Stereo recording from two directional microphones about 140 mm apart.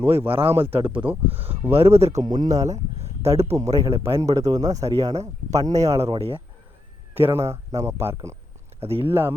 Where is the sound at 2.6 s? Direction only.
50° right (ahead or behind).